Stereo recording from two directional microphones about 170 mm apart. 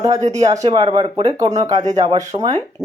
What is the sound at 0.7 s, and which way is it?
Speech, 30° right (ahead or behind).